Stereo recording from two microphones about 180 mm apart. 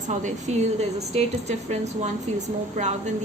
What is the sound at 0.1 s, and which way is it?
A woman's voice, 40° right (ahead or behind).